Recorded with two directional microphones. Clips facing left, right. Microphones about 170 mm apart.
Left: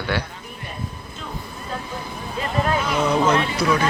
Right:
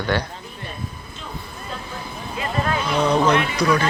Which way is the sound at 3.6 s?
10° left (ahead or behind).